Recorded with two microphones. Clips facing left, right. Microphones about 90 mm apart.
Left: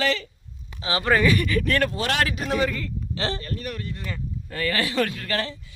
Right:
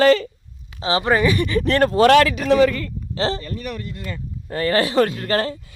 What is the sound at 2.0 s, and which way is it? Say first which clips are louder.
Speech: right 12 dB; 65° right (ahead or behind).